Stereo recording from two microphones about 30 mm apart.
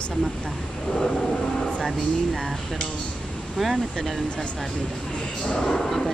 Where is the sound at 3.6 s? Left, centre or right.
Centre.